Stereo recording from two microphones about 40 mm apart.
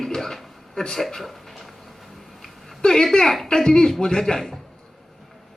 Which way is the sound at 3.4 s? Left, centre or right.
Centre.